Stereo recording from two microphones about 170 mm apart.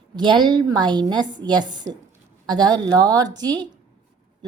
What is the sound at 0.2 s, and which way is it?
A woman's voice, 25° right (ahead or behind).